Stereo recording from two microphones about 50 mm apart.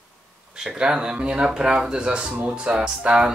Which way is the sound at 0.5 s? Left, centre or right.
Centre.